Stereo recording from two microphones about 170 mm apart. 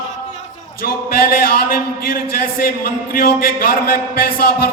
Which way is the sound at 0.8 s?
60° left (ahead or behind).